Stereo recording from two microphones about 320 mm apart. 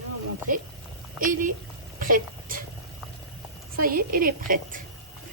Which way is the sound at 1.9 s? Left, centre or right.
Right.